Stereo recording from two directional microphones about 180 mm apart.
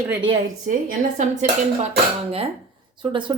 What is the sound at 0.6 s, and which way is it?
Speech, 45° right (ahead or behind).